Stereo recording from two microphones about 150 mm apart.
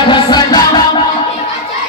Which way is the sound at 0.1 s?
30° left (ahead or behind).